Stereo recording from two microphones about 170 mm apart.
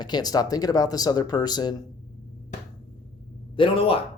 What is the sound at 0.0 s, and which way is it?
Speech, 25° left (ahead or behind).